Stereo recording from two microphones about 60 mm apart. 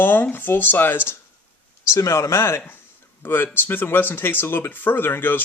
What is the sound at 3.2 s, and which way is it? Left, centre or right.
Speech, left.